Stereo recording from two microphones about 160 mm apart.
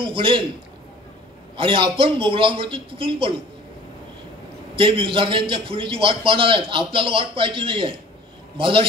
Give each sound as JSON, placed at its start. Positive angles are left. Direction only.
{"t": 0.0, "sound": "a man's voice", "side_deg": -30}
{"t": 1.6, "sound": "a man's voice", "side_deg": -35}
{"t": 4.7, "sound": "a man's voice", "side_deg": -30}